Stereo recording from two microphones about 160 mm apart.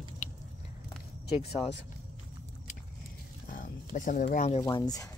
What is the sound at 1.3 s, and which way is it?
Speech, 35° left (ahead or behind).